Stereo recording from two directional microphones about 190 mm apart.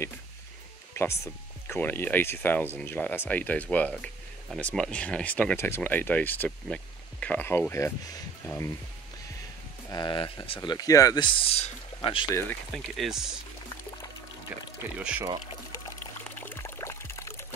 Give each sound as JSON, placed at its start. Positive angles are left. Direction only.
{"t": 1.7, "sound": "speech", "side_deg": 10}
{"t": 9.8, "sound": "speech", "side_deg": 25}
{"t": 12.7, "sound": "speech", "side_deg": 0}
{"t": 14.8, "sound": "speech", "side_deg": -5}
{"t": 16.0, "sound": "pour", "side_deg": 10}